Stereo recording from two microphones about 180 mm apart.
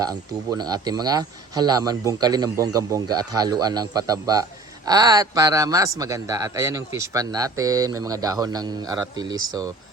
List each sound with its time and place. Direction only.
0.0 s speech: 20° right (ahead or behind)